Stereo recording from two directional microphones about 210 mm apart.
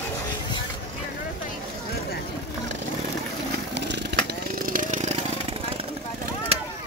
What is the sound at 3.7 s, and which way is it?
Chainsaw, 55° right (ahead or behind).